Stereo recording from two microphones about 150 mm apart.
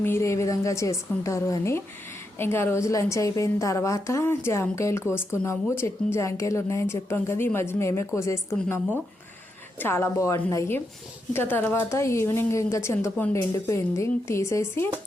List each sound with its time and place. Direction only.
0.0 s a woman's voice: 15° left (ahead or behind)